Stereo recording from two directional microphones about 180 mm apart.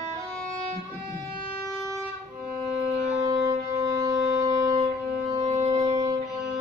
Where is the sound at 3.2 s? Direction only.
20° right (ahead or behind).